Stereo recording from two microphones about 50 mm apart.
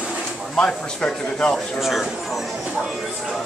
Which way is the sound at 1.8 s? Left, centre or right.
Centre.